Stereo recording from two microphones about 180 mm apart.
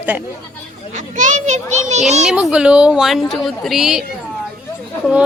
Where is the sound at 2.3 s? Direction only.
5° right (ahead or behind).